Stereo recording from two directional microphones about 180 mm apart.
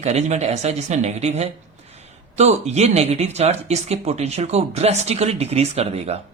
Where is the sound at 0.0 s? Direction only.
40° right (ahead or behind).